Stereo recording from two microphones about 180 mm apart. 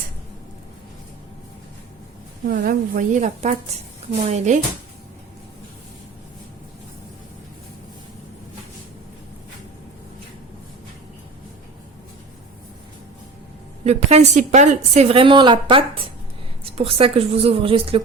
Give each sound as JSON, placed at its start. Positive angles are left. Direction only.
{"t": 2.5, "sound": "a woman's voice", "side_deg": -55}
{"t": 13.8, "sound": "a woman's voice", "side_deg": -35}